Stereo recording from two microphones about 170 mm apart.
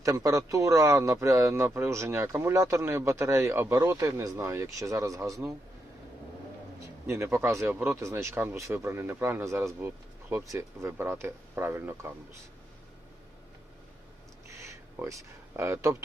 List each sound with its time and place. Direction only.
0.0 s speech: 20° right (ahead or behind)
7.1 s speech: 15° right (ahead or behind)
14.7 s a sound: 15° right (ahead or behind)
15.5 s speech: 15° right (ahead or behind)